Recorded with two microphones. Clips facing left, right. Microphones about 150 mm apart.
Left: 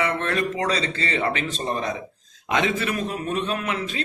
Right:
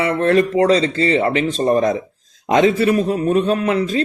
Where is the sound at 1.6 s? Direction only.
45° right (ahead or behind).